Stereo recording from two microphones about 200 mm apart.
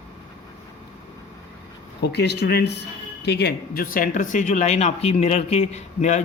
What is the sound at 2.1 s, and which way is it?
Speech, 55° left (ahead or behind).